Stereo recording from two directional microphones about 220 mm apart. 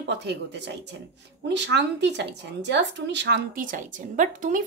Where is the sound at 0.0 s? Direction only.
50° right (ahead or behind).